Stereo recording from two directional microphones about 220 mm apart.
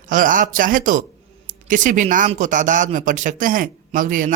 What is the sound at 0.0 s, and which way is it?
A man's voice, 35° right (ahead or behind).